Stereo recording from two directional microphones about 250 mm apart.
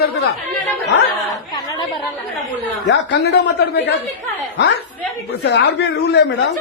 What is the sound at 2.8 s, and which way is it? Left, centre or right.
A woman's voice, left.